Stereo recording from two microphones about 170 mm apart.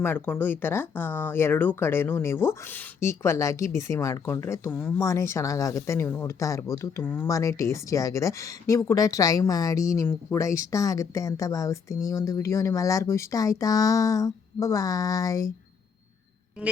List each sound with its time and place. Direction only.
0.0 s speech: 10° left (ahead or behind)